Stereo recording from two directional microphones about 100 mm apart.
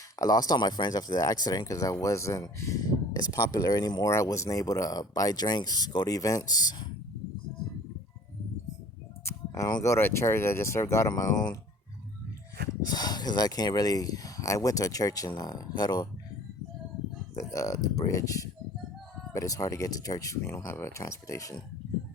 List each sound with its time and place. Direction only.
0.2 s speech: 40° left (ahead or behind)
4.1 s speech: 30° left (ahead or behind)
9.5 s speech: 45° left (ahead or behind)
9.9 s speech: 25° left (ahead or behind)
11.1 s speech: 40° left (ahead or behind)
12.8 s speech: 40° left (ahead or behind)
17.5 s speech: 35° left (ahead or behind)
20.4 s speech: 25° left (ahead or behind)